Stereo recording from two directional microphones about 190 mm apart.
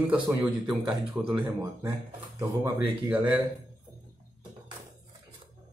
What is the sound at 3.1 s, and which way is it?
Speech, 10° right (ahead or behind).